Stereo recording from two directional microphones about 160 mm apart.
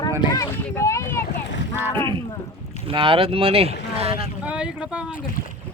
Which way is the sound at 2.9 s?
35° right (ahead or behind).